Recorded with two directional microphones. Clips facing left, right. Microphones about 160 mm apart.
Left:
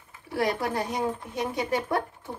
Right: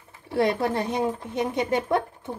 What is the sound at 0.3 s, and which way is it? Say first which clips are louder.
A woman's voice: right 4 dB; 25° right (ahead or behind).